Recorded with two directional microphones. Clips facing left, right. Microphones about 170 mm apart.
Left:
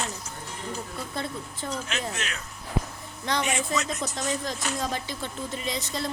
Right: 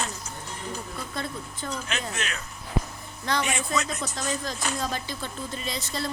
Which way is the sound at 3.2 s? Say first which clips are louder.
Even; 20° left (ahead or behind).